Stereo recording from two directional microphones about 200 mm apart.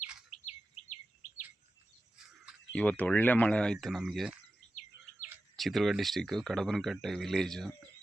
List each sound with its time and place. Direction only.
0.4 s bird: 35° left (ahead or behind)
1.2 s chirp: 40° left (ahead or behind)
2.5 s speech: 5° left (ahead or behind)
5.5 s speech: centre (ahead or behind)